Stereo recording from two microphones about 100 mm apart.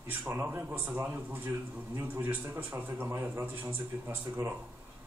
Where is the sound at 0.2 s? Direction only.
20° right (ahead or behind).